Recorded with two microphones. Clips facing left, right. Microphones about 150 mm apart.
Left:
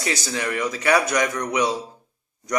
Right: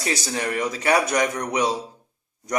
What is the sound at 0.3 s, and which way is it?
A man's voice, 30° right (ahead or behind).